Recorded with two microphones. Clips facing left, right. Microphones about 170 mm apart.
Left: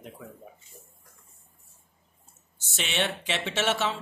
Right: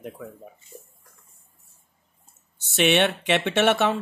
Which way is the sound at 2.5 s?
65° right (ahead or behind).